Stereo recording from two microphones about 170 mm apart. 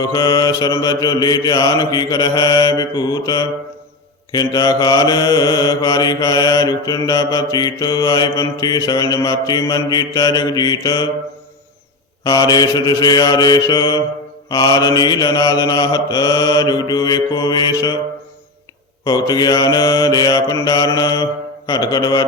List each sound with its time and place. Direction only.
0.0 s mantra: 20° left (ahead or behind)
12.2 s mantra: 20° left (ahead or behind)
19.0 s mantra: 25° left (ahead or behind)